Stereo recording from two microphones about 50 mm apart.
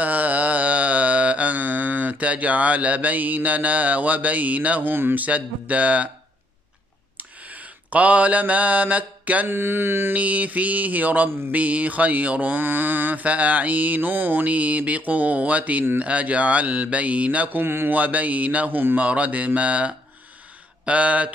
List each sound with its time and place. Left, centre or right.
0.0 s music: right
4.9 s mantra: right
5.2 s speech: right
7.2 s mantra: right
9.5 s mantra: right
10.1 s mantra: right
16.0 s speech: right
17.5 s mantra: right
17.9 s mantra: right
18.9 s speech: right